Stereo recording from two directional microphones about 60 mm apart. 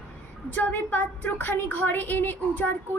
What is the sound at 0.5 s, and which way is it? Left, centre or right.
Speech, left.